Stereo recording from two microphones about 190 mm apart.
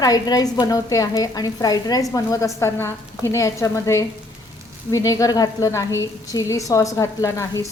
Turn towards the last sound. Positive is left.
turn(degrees=15)  # may be behind; listen again after turning